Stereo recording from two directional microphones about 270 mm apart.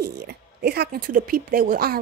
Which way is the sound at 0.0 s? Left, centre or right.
Right.